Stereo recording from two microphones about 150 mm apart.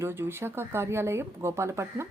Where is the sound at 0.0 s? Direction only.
15° right (ahead or behind).